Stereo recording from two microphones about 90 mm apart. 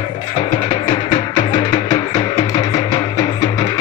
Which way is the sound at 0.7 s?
50° left (ahead or behind).